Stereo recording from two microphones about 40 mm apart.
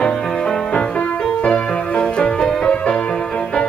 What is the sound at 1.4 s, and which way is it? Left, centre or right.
Music, left.